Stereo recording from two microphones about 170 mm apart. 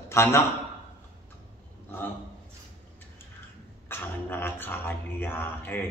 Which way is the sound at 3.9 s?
10° left (ahead or behind).